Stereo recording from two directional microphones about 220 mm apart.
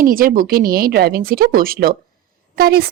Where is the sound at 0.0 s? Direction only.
40° right (ahead or behind).